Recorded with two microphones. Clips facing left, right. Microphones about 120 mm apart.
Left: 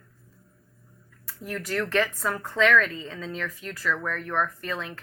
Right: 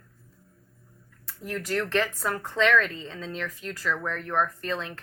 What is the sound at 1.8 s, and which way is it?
A woman's voice, 20° right (ahead or behind).